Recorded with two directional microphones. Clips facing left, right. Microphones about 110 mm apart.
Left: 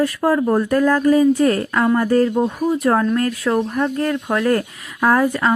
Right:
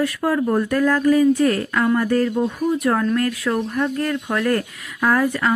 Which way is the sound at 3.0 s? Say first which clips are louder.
Left 2 dB; 20° left (ahead or behind).